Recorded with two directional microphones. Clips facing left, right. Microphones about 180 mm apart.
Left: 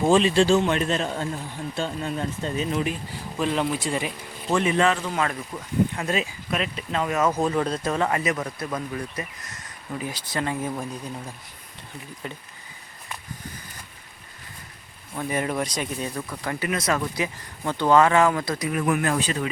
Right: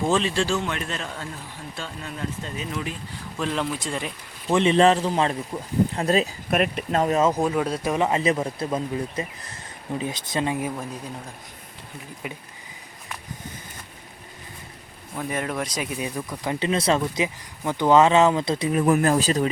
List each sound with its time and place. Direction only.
0.0 s a man's voice: 15° left (ahead or behind)
3.3 s speech: 5° left (ahead or behind)
4.5 s speech: 25° right (ahead or behind)
6.5 s speech: 50° right (ahead or behind)
7.1 s speech: 25° right (ahead or behind)
7.3 s speech: 5° right (ahead or behind)
12.2 s speech: 10° right (ahead or behind)
15.1 s speech: centre (ahead or behind); by 19.5 s 35° right (ahead or behind)